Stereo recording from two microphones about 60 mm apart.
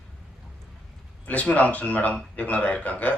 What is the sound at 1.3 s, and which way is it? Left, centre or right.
A man's voice, left.